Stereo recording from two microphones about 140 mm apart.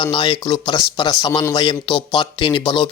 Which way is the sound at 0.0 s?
35° left (ahead or behind).